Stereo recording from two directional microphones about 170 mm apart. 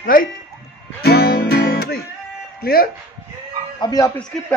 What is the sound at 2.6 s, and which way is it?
Speech, 60° left (ahead or behind).